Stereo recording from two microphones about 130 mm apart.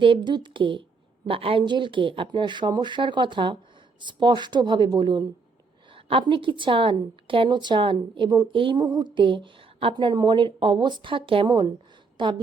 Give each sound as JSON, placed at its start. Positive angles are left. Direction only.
{"t": 0.0, "sound": "a woman's voice", "side_deg": -40}